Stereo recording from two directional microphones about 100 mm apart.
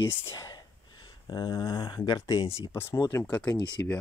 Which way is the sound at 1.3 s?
45° left (ahead or behind).